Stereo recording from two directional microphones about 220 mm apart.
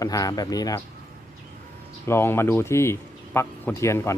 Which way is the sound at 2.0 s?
10° left (ahead or behind).